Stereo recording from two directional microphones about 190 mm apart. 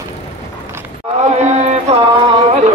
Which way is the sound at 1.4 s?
35° right (ahead or behind).